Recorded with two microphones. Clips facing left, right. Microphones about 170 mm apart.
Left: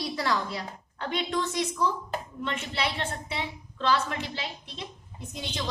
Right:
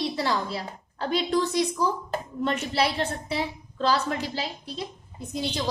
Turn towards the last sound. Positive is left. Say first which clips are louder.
# right 7 dB
turn(degrees=-35)  # may be behind; listen again after turning